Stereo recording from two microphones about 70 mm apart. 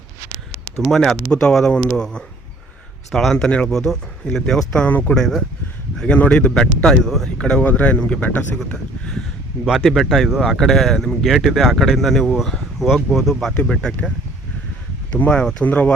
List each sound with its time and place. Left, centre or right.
0.8 s speech: centre
3.3 s speech: centre
4.9 s speech: left
5.1 s speech: centre
9.6 s speech: centre
11.2 s speech: centre
13.5 s speech: centre
15.3 s speech: centre